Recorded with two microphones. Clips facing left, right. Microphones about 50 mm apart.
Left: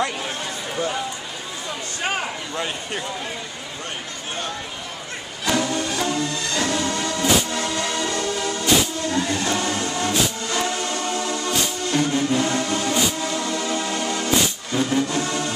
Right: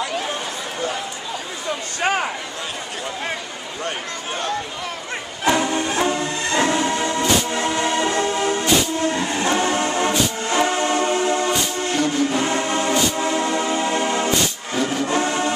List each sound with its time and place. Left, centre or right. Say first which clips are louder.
5.4 s music: right 3 dB; right